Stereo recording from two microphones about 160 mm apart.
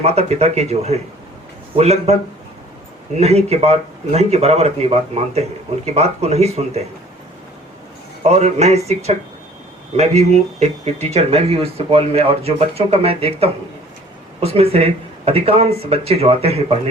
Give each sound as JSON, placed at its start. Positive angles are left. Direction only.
{"t": 0.0, "sound": "a man's voice", "side_deg": -40}
{"t": 3.2, "sound": "a man's voice", "side_deg": -40}
{"t": 8.2, "sound": "speech", "side_deg": -45}
{"t": 10.0, "sound": "a man's voice", "side_deg": -40}